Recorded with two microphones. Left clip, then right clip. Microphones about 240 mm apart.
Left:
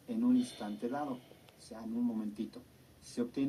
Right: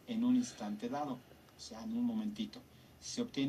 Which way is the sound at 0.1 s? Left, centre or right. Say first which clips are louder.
Left 2 dB; right.